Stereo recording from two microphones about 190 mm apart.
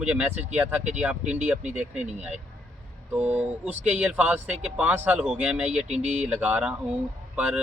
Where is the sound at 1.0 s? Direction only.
5° right (ahead or behind).